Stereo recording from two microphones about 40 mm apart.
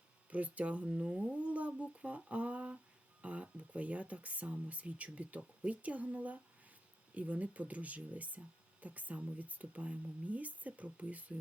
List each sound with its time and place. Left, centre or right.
0.3 s speech: right